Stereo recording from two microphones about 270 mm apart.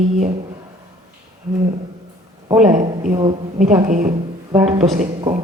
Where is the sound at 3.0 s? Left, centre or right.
Centre.